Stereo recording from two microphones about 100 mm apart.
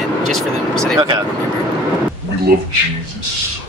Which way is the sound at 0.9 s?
45° right (ahead or behind).